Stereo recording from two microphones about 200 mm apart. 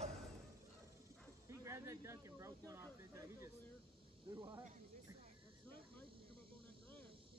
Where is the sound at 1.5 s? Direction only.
15° right (ahead or behind).